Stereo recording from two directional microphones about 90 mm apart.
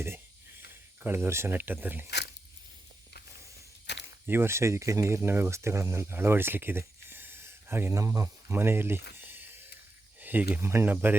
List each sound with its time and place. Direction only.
0.7 s speech: 25° right (ahead or behind)
4.3 s speech: 25° right (ahead or behind)
7.9 s speech: 40° right (ahead or behind)